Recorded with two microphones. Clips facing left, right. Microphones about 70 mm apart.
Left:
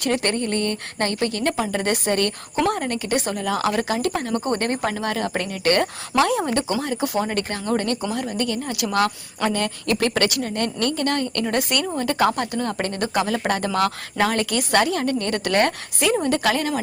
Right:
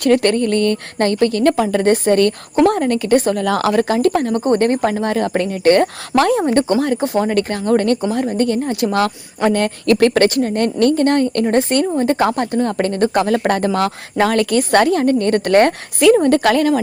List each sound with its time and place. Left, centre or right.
0.0 s speech: right
0.5 s a sound: left
0.9 s speech: right
3.4 s speech: right
4.4 s speech: right
7.0 s speech: right
7.3 s speech: right